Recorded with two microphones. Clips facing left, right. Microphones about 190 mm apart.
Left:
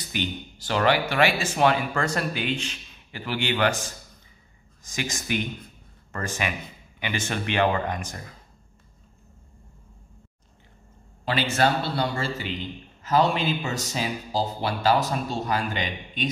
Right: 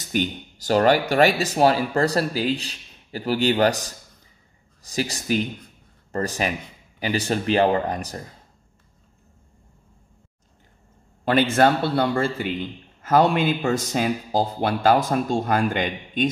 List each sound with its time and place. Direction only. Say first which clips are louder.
0.0 s speech: right 5 dB; 45° right (ahead or behind)
11.2 s speech: right 6 dB; 55° right (ahead or behind)